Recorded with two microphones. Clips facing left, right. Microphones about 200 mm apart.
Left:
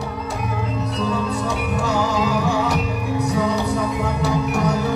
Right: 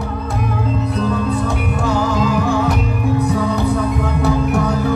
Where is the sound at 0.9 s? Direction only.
55° right (ahead or behind).